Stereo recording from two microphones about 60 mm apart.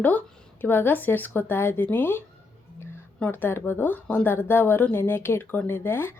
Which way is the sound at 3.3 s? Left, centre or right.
Left.